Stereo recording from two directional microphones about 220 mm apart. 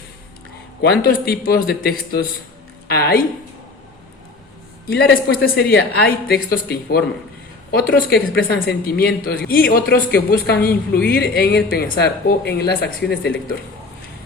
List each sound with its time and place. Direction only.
0.8 s a woman's voice: 45° left (ahead or behind)
4.9 s speech: 45° left (ahead or behind)